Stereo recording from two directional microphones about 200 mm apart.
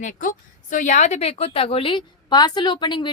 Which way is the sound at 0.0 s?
40° left (ahead or behind).